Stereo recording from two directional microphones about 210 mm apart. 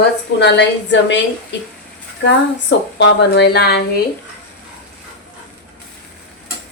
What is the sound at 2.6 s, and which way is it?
Speech, 55° left (ahead or behind).